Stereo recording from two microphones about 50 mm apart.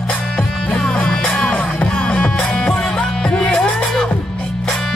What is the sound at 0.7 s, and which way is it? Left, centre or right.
Music, centre.